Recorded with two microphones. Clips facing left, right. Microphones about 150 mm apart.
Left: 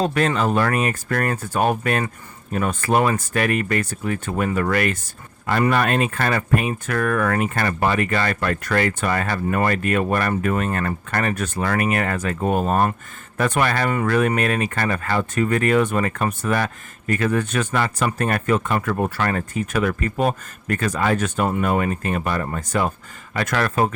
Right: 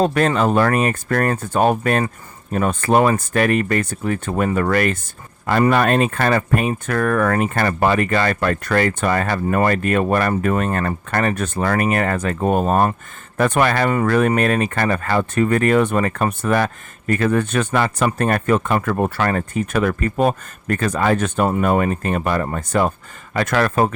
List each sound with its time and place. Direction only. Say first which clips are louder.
0.0 s speech: right 3 dB; 45° right (ahead or behind)
17.6 s speech: right 3 dB; 55° right (ahead or behind)
17.8 s speech: right 3 dB; 40° right (ahead or behind)